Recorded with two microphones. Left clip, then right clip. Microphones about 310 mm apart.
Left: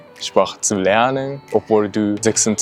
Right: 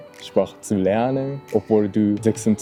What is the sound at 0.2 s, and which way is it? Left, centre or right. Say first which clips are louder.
Speech: left 5 dB; left.